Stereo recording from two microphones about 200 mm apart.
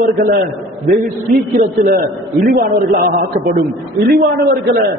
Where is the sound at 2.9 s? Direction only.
45° right (ahead or behind).